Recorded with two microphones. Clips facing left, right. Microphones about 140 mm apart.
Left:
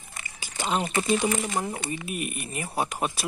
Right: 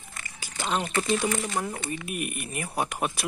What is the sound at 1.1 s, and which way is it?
Speech, 10° left (ahead or behind).